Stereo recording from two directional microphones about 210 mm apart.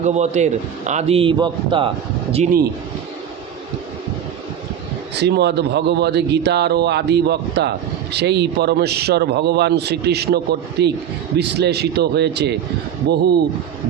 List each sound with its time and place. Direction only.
0.0 s a man's voice: 35° right (ahead or behind)
5.1 s a man's voice: 55° right (ahead or behind)